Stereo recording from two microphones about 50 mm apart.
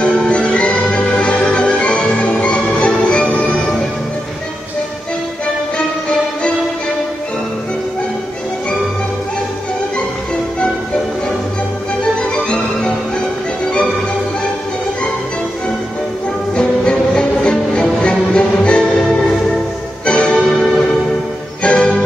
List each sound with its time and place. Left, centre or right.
0.0 s music: left
12.2 s music: centre
16.5 s music: centre
20.1 s music: left
21.6 s music: centre